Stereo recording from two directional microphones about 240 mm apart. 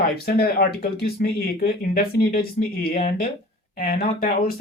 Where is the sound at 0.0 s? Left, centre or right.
Left.